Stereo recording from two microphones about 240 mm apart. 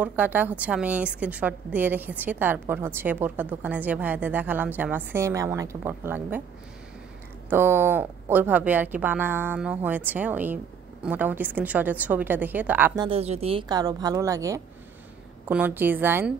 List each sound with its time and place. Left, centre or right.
0.0 s a woman's voice: centre
7.4 s a woman's voice: centre
13.0 s a woman's voice: right; by 16.3 s centre